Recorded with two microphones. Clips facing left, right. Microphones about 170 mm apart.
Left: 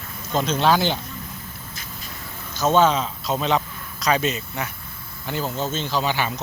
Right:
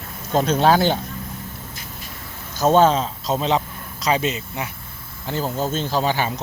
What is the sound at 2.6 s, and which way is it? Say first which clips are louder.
Speech: right 3 dB; 35° right (ahead or behind).